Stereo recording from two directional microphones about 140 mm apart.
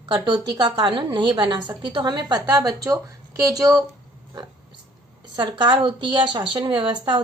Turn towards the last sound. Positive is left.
turn(degrees=-35)  # may be behind; listen again after turning